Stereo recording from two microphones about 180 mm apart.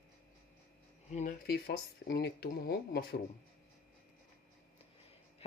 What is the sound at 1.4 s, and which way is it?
Speech, 60° left (ahead or behind).